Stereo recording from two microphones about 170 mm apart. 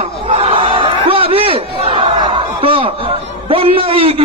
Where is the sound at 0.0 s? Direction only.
35° right (ahead or behind).